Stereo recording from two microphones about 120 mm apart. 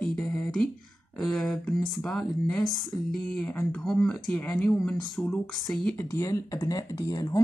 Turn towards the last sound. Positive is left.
turn(degrees=30)  # may be behind; listen again after turning